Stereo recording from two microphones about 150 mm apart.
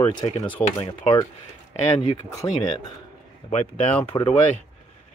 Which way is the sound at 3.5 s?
45° left (ahead or behind).